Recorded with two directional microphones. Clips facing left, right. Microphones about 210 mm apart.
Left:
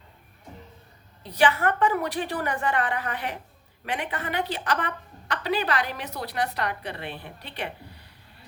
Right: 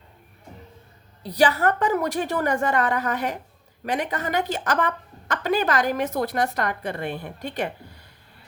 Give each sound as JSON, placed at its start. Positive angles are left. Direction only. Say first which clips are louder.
{"t": 1.2, "sound": "a woman's voice", "louder": "right 3 dB", "side_deg": -35}